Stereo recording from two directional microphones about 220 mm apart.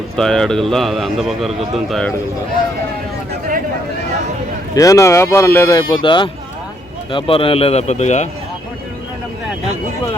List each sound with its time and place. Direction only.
0.2 s a man's voice: 5° left (ahead or behind)
4.7 s a man's voice: 15° left (ahead or behind); by 8.3 s 30° left (ahead or behind)